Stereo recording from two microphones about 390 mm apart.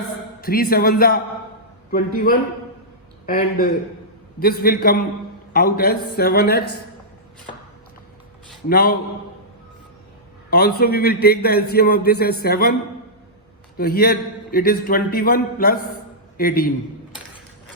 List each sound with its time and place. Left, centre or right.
0.4 s a man's voice: left
8.7 s a man's voice: left
10.5 s a man's voice: left
13.7 s a man's voice: left